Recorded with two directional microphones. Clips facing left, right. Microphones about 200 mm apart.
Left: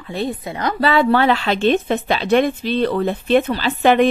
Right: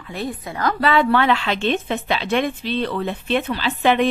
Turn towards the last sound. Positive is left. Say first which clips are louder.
# left 4 dB
turn(degrees=45)  # may be behind; listen again after turning